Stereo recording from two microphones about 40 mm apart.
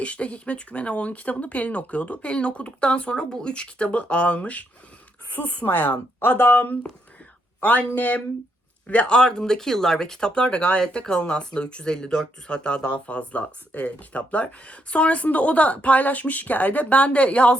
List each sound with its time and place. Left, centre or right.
0.0 s speech: left
7.6 s speech: left
8.9 s speech: left